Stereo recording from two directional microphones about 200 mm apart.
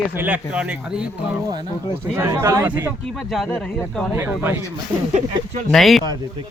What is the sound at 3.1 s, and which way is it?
Speech, centre (ahead or behind).